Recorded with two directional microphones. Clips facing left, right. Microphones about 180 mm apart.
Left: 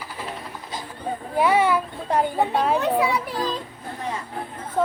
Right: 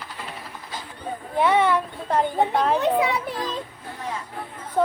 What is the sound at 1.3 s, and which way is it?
Speech, 5° left (ahead or behind).